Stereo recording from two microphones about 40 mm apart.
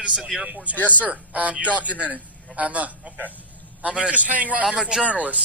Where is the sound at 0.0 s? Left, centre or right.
Right.